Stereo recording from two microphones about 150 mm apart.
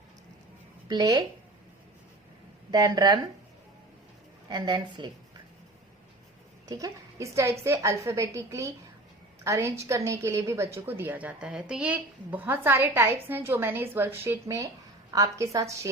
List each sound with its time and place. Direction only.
0.9 s a woman's voice: 30° right (ahead or behind)
2.7 s a woman's voice: 25° right (ahead or behind)
4.4 s a woman's voice: 30° right (ahead or behind)
6.7 s a woman's voice: 20° right (ahead or behind)